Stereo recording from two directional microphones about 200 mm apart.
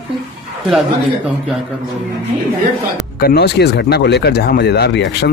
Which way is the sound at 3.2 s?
55° left (ahead or behind).